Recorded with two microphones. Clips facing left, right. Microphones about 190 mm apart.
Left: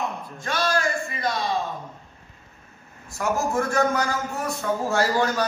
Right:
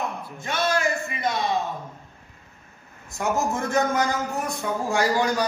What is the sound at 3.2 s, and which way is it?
A man's voice, 20° right (ahead or behind).